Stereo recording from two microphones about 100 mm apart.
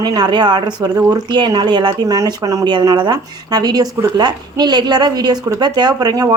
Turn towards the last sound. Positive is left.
turn(degrees=-40)  # may be behind; listen again after turning